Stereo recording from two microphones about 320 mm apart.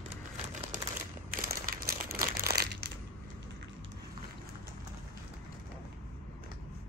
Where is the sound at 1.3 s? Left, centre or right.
Right.